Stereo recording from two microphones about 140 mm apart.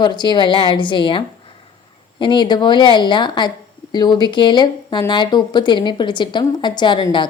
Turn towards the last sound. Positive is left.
turn(degrees=35)  # may be behind; listen again after turning